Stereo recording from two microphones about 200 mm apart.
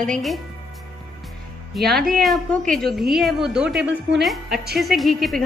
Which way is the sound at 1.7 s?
Centre (ahead or behind).